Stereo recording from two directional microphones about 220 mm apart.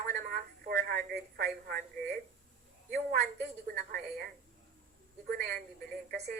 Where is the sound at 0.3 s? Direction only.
40° right (ahead or behind).